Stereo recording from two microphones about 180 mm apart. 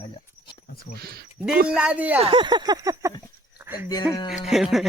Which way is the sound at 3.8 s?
20° left (ahead or behind).